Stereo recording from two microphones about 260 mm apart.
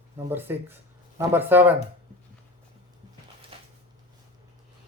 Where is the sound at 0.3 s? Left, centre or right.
Centre.